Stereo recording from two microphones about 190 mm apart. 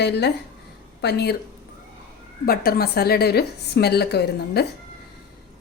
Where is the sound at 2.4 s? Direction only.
50° left (ahead or behind).